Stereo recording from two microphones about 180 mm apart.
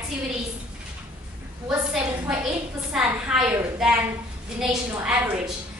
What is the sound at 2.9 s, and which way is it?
A woman's voice, 5° right (ahead or behind).